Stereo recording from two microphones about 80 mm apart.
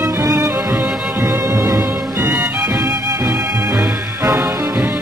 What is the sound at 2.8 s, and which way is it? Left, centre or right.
Music, right.